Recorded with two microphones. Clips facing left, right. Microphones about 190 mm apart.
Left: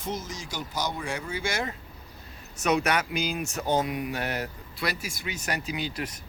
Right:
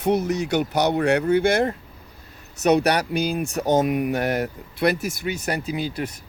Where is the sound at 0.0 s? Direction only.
65° right (ahead or behind).